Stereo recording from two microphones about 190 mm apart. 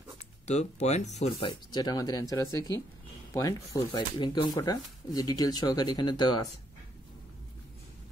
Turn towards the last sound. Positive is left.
turn(degrees=20)  # may be behind; listen again after turning